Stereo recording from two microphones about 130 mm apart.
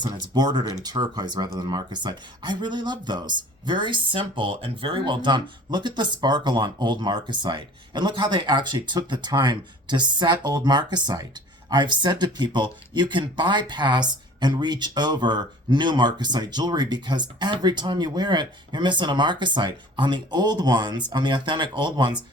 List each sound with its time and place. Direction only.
0.0 s speech: 35° right (ahead or behind)